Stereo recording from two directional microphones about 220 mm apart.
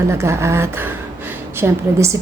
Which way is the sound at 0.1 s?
10° right (ahead or behind).